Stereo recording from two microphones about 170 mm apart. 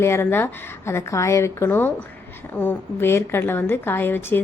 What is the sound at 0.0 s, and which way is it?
Speech, 15° left (ahead or behind).